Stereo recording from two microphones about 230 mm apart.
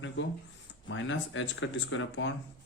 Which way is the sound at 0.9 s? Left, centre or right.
Left.